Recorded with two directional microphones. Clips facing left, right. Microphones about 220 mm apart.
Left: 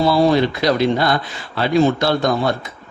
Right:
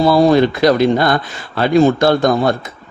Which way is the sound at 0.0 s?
45° right (ahead or behind).